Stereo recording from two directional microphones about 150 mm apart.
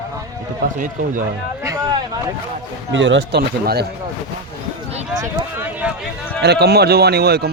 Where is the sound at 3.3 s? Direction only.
90° right.